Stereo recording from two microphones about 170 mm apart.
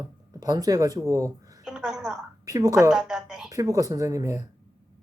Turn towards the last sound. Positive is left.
turn(degrees=-20)  # may be behind; listen again after turning